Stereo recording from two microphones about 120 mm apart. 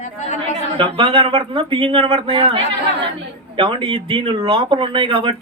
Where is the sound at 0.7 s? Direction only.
45° right (ahead or behind).